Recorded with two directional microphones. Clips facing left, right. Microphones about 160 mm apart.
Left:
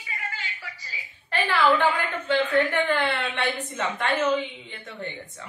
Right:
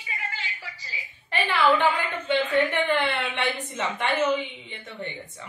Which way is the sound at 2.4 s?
20° right (ahead or behind).